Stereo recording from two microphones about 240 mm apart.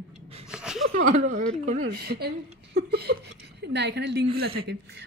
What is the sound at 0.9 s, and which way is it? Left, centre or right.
Speech, right.